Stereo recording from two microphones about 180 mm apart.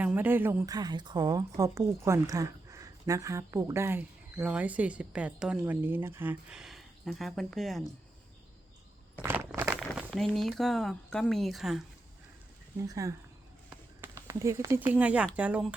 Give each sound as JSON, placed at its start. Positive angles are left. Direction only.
{"t": 0.0, "sound": "a woman's voice", "side_deg": -10}
{"t": 9.2, "sound": "speech", "side_deg": -15}
{"t": 12.9, "sound": "a woman's voice", "side_deg": -20}
{"t": 13.7, "sound": "a sound", "side_deg": -10}
{"t": 15.4, "sound": "a woman's voice", "side_deg": -10}